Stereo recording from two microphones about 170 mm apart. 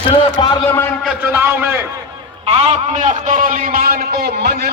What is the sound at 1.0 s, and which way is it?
Speech, 10° right (ahead or behind).